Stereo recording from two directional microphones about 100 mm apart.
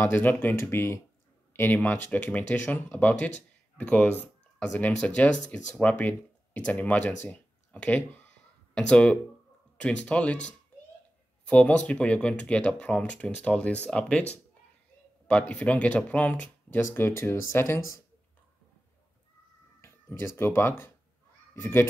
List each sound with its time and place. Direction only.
0.0 s speech: 20° left (ahead or behind)
1.5 s a sound: 20° left (ahead or behind)
1.8 s speech: 10° left (ahead or behind)
15.2 s speech: 10° left (ahead or behind); by 18.0 s 25° left (ahead or behind)
20.1 s speech: 25° left (ahead or behind)